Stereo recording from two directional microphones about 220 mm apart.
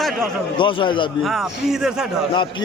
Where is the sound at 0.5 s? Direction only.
20° left (ahead or behind).